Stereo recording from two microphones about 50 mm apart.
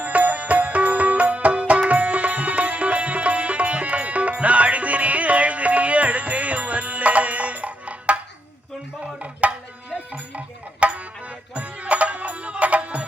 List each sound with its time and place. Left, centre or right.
0.0 s music: right
9.1 s tabla: right
10.1 s music: right